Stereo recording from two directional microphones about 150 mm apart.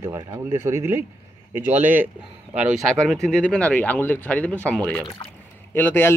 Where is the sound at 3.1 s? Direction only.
5° left (ahead or behind).